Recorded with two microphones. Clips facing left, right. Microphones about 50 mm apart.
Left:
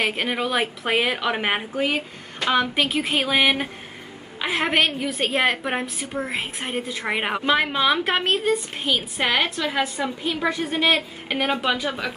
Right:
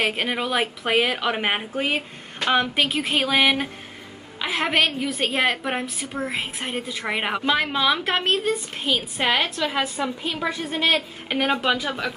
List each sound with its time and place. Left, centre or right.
0.0 s a woman's voice: centre
1.8 s speech: centre
2.7 s a woman's voice: centre
10.6 s a woman's voice: left
11.2 s a woman's voice: centre